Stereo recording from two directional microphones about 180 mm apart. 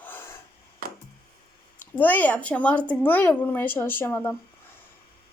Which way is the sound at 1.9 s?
10° left (ahead or behind).